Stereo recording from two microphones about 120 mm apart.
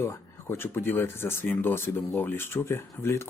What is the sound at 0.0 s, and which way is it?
Speech, 20° left (ahead or behind).